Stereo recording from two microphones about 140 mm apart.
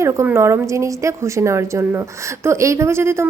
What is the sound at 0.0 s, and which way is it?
A woman's voice, 20° right (ahead or behind).